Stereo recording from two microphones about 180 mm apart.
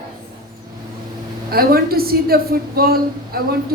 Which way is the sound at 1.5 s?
55° right (ahead or behind).